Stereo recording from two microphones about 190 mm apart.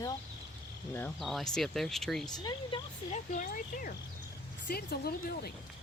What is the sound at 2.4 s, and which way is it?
Speech, 20° left (ahead or behind).